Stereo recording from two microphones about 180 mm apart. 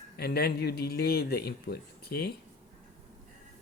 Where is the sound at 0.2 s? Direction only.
60° left (ahead or behind).